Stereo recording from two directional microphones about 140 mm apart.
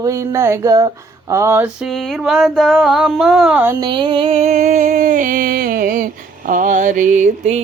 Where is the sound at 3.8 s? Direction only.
35° right (ahead or behind).